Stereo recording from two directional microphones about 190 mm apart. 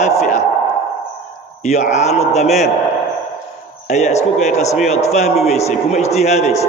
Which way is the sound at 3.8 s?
35° left (ahead or behind).